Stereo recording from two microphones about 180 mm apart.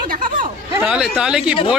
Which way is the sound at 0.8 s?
5° right (ahead or behind).